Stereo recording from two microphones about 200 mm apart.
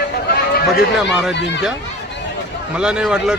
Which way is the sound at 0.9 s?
Centre (ahead or behind).